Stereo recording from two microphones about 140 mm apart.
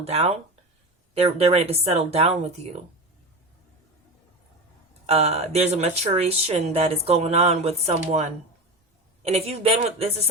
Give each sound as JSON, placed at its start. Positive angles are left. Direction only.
{"t": 0.0, "sound": "speech", "side_deg": -45}
{"t": 5.0, "sound": "speech", "side_deg": -45}